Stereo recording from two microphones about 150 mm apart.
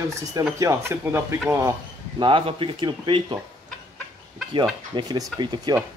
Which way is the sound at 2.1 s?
35° right (ahead or behind).